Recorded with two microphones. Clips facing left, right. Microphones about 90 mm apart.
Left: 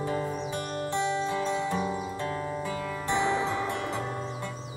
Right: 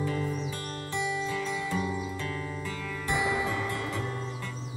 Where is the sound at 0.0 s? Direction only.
35° left (ahead or behind).